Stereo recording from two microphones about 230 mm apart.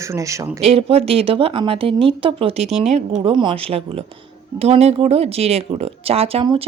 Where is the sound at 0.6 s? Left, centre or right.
Right.